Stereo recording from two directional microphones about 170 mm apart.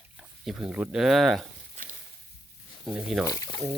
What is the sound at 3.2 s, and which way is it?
Speech, 20° left (ahead or behind).